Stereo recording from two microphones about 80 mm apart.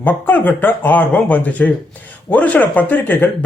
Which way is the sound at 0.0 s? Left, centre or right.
Left.